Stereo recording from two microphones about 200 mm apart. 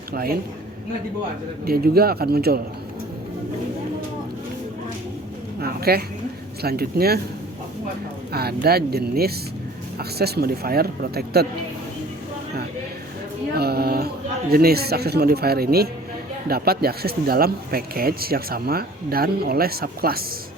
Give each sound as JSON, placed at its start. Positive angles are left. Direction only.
{"t": 0.1, "sound": "a woman's voice", "side_deg": -50}
{"t": 1.6, "sound": "speech", "side_deg": -50}
{"t": 5.5, "sound": "speech", "side_deg": -50}
{"t": 8.3, "sound": "speech", "side_deg": -50}
{"t": 13.5, "sound": "speech", "side_deg": -50}